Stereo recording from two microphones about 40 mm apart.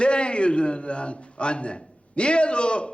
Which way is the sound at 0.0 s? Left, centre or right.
Left.